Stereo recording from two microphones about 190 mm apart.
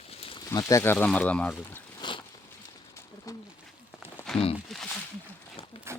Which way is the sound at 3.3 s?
15° left (ahead or behind).